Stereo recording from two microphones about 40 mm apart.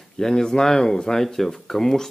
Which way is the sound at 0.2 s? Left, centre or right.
Centre.